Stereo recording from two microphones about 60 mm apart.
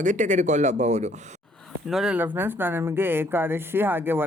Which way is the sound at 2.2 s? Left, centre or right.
Right.